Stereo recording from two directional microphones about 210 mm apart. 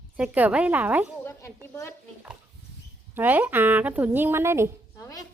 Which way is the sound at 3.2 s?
10° right (ahead or behind).